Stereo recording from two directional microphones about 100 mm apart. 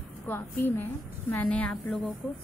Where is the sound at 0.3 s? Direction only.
20° left (ahead or behind).